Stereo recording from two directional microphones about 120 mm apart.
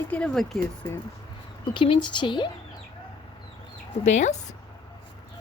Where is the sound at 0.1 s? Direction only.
5° left (ahead or behind).